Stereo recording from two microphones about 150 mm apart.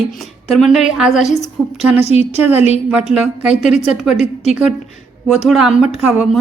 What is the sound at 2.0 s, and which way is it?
Speech, 45° left (ahead or behind).